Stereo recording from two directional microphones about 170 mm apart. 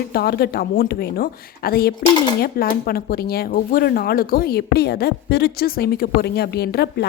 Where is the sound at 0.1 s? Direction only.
65° left (ahead or behind).